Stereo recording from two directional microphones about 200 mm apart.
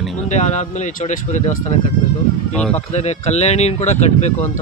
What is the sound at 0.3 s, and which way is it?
Speech, 35° left (ahead or behind).